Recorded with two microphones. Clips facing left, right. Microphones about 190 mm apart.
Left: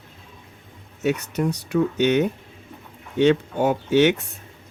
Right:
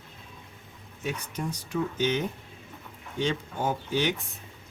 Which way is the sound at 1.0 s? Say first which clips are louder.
Left 10 dB; 70° left (ahead or behind).